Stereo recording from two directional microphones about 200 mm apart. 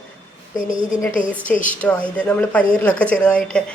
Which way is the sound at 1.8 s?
5° left (ahead or behind).